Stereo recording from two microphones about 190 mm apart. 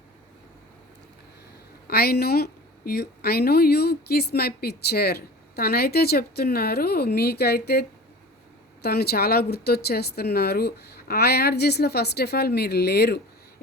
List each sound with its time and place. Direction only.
1.9 s a woman's voice: 55° left (ahead or behind)